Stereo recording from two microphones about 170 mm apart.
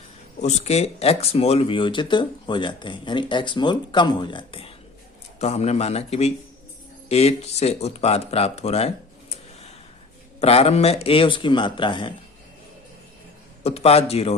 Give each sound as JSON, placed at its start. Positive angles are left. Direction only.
{"t": 0.4, "sound": "speech", "side_deg": 40}
{"t": 5.4, "sound": "speech", "side_deg": 40}
{"t": 10.4, "sound": "speech", "side_deg": 35}
{"t": 13.7, "sound": "speech", "side_deg": 35}